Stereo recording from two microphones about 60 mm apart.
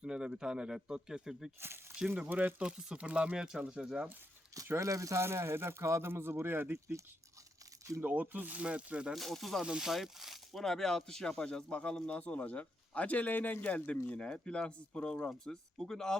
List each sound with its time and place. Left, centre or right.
0.0 s speech: centre
1.6 s speech: right
2.1 s speech: right
2.6 s speech: centre
4.6 s speech: right
5.2 s speech: right
6.7 s speech: right
8.0 s speech: right
9.1 s speech: centre
9.6 s speech: centre
15.5 s speech: centre